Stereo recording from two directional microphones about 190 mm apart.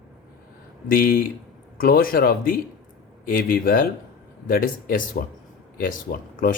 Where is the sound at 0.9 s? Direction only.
50° left (ahead or behind).